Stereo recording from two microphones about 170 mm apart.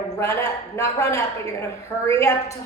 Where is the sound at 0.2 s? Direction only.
15° left (ahead or behind).